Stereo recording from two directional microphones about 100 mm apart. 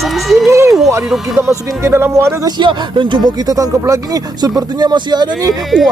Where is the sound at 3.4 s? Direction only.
35° right (ahead or behind).